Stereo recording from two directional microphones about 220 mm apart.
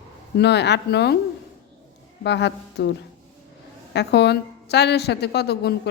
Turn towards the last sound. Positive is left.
turn(degrees=45)  # may be behind; listen again after turning